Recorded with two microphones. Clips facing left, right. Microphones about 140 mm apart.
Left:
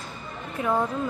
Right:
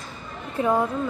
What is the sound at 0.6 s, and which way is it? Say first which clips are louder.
Speech: right 4 dB; 30° right (ahead or behind).